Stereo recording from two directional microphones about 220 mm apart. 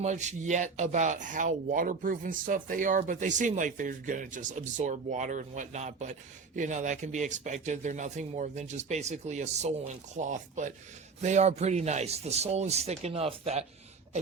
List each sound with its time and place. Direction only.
0.0 s speech: 30° right (ahead or behind)